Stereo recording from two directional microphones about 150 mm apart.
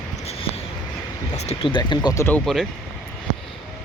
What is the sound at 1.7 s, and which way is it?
Speech, 30° left (ahead or behind).